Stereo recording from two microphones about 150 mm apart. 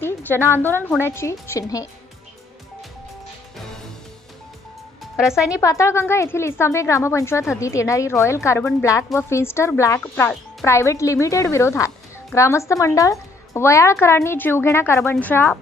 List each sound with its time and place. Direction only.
0.0 s speech: 15° left (ahead or behind)
5.0 s speech: 5° right (ahead or behind)
5.6 s speech: 20° left (ahead or behind)